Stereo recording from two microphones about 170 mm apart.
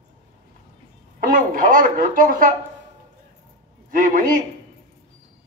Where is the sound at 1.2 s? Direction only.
55° right (ahead or behind).